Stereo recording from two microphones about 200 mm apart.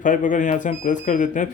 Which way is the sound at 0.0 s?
40° left (ahead or behind).